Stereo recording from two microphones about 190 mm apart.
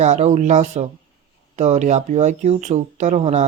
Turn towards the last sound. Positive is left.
turn(degrees=-35)  # may be behind; listen again after turning